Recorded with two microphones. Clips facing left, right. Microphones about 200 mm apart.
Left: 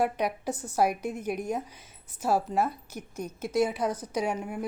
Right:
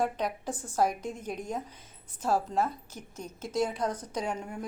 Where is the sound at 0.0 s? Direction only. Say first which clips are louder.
Left 3 dB; 10° left (ahead or behind).